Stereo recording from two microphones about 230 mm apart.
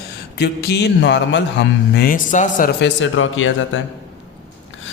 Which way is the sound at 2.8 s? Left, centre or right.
Left.